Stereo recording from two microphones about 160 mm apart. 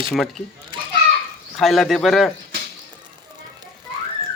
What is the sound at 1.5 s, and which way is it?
Speech, centre (ahead or behind).